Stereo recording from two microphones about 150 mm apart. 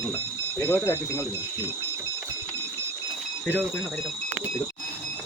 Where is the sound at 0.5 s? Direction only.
15° left (ahead or behind).